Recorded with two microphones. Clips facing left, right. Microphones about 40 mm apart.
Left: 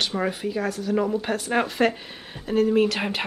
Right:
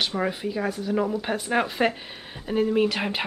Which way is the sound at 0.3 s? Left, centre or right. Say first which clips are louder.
Left 1 dB; centre.